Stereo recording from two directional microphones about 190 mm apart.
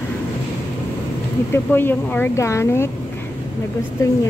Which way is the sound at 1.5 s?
10° left (ahead or behind).